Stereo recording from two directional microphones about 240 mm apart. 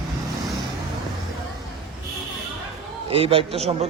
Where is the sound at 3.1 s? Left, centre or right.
Right.